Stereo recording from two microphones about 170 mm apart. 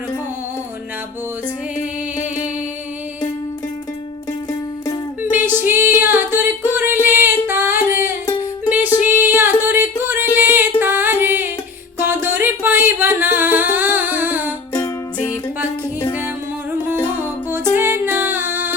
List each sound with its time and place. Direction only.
5.2 s music: 10° right (ahead or behind)
6.7 s singing: 10° right (ahead or behind)
9.0 s music: 10° right (ahead or behind)
14.7 s music: 20° left (ahead or behind)
17.5 s music: 15° right (ahead or behind)